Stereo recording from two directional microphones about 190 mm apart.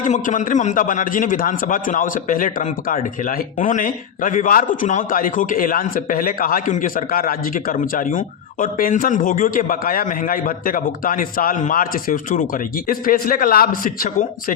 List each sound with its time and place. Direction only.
0.0 s a man's voice: 40° left (ahead or behind)